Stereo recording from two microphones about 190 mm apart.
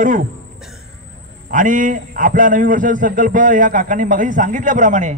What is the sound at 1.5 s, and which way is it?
A man's voice, 45° right (ahead or behind).